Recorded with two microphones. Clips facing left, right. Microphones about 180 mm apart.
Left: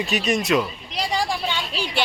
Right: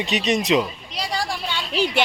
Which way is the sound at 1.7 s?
20° right (ahead or behind).